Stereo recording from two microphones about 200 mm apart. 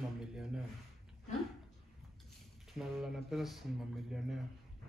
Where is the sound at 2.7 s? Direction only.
Centre (ahead or behind).